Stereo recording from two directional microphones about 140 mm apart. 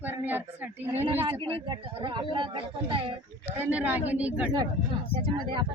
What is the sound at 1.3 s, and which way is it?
Speech, 35° right (ahead or behind).